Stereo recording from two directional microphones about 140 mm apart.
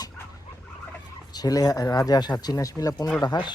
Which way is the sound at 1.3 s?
25° left (ahead or behind).